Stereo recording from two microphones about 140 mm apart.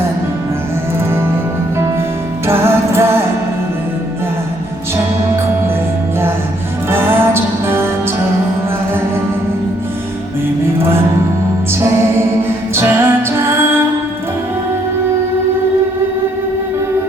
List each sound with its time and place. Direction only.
2.5 s music: 20° right (ahead or behind)
6.9 s music: 15° right (ahead or behind)
12.4 s music: 20° right (ahead or behind)